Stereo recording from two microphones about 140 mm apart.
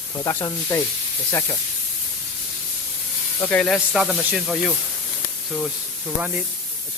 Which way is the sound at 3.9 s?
5° right (ahead or behind).